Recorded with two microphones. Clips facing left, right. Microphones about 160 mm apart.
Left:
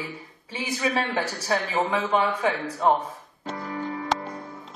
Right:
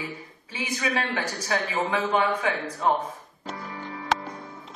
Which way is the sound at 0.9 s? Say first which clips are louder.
Left 2 dB; 30° left (ahead or behind).